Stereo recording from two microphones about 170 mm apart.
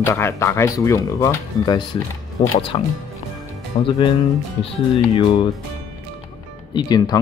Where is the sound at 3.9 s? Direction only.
30° left (ahead or behind).